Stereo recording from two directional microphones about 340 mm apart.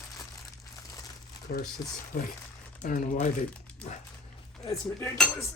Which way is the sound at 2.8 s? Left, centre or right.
Left.